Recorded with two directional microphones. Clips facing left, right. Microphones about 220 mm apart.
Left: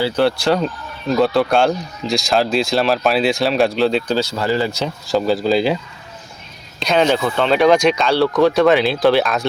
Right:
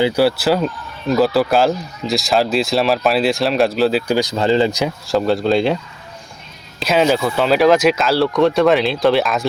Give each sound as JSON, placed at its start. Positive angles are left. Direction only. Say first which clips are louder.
{"t": 0.0, "sound": "speech", "louder": "right 2 dB", "side_deg": -10}
{"t": 4.1, "sound": "speech", "louder": "right 3 dB", "side_deg": -15}
{"t": 5.0, "sound": "speech", "louder": "even", "side_deg": 0}